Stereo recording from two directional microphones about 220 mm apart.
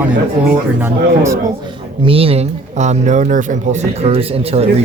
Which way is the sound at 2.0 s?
25° right (ahead or behind).